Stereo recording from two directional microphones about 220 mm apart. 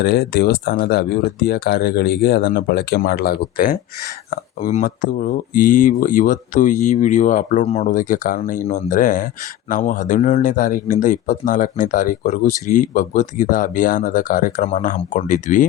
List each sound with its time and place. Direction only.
0.0 s speech: 45° left (ahead or behind)